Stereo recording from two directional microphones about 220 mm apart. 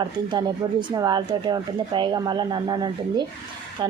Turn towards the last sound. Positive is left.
turn(degrees=-20)  # may be behind; listen again after turning